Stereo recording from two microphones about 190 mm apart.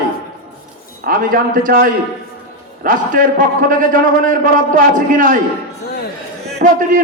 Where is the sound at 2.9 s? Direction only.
45° right (ahead or behind).